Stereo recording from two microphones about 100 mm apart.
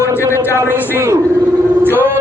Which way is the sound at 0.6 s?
20° right (ahead or behind).